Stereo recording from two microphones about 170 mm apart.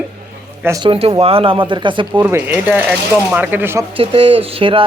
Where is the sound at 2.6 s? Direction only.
10° right (ahead or behind).